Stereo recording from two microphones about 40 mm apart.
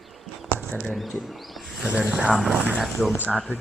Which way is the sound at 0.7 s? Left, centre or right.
Left.